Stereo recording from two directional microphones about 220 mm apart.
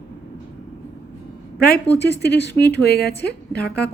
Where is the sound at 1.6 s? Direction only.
45° left (ahead or behind).